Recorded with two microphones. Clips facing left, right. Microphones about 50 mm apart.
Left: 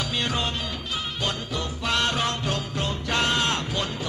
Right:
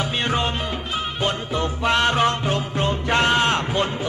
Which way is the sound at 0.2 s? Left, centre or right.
Right.